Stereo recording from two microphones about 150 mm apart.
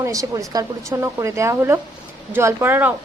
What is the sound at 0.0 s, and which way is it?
Speech, 20° right (ahead or behind).